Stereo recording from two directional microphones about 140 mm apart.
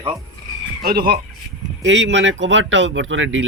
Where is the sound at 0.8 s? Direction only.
90° right.